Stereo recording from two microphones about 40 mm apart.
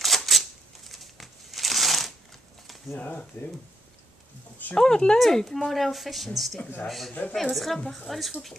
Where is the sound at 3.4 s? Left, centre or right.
Left.